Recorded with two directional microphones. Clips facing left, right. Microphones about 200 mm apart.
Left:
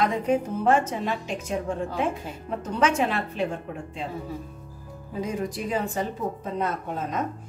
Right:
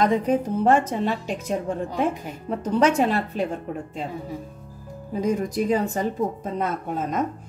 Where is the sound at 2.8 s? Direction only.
40° right (ahead or behind).